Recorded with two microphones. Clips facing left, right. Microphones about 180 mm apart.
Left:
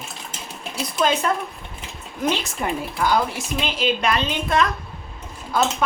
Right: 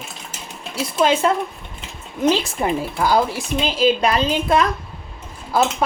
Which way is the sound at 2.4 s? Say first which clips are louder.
Right 4 dB; 30° right (ahead or behind).